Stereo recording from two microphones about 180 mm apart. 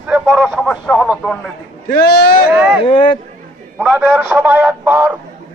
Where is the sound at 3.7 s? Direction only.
5° right (ahead or behind).